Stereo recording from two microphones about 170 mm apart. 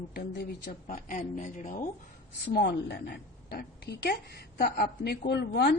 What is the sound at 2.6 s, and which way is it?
A woman's voice, 70° left (ahead or behind).